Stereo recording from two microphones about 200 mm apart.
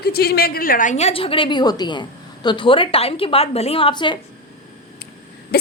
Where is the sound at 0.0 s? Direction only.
50° left (ahead or behind); by 4.2 s 25° left (ahead or behind).